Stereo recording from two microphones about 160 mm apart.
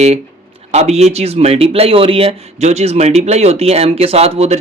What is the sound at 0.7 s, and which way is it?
A man's voice, 45° right (ahead or behind).